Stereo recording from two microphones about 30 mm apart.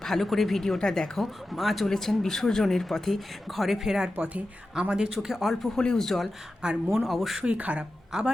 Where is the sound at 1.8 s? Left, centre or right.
Centre.